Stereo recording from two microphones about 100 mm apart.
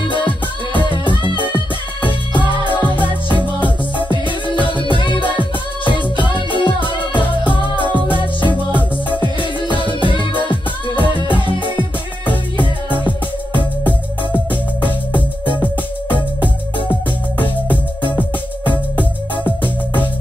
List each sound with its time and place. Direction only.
0.7 s music: 55° left (ahead or behind)
15.1 s music: 55° left (ahead or behind)